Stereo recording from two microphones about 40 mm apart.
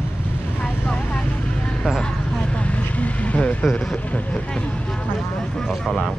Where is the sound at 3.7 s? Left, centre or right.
Left.